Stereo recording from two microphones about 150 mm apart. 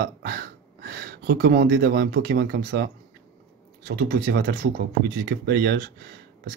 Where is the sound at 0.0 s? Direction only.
75° right (ahead or behind); by 5.9 s 90° right.